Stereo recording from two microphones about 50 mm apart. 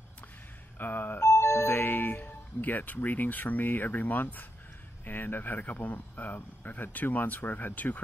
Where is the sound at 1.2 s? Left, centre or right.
Left.